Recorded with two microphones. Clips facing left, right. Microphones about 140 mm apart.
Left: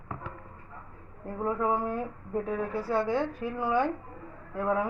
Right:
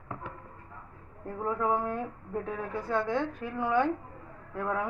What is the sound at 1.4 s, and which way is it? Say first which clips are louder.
Speech: left 1 dB; 10° left (ahead or behind).